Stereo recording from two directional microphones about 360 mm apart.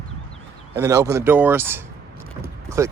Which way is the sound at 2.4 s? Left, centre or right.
Centre.